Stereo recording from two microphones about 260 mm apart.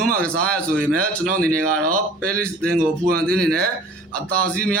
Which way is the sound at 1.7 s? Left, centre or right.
Right.